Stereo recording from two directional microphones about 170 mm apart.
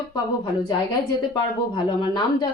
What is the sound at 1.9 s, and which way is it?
Speech, 25° left (ahead or behind).